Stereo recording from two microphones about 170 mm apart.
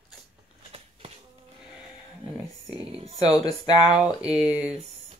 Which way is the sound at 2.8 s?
35° right (ahead or behind).